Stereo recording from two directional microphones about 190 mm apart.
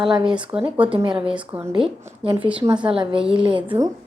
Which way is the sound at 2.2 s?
25° right (ahead or behind).